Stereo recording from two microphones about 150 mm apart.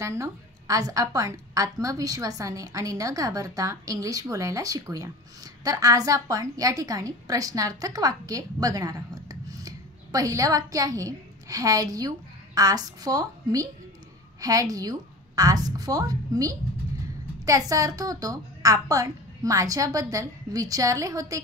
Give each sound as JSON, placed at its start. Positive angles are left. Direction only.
{"t": 0.0, "sound": "a woman's voice", "side_deg": -20}